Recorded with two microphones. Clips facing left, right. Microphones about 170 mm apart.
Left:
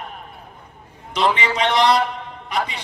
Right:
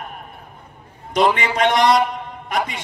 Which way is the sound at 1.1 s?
50° right (ahead or behind).